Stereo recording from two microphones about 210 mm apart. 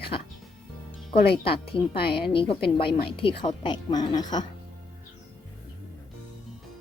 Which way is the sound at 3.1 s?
25° left (ahead or behind).